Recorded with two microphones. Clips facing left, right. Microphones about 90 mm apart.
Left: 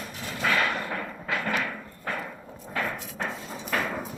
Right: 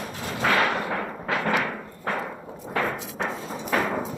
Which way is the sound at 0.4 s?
45° right (ahead or behind).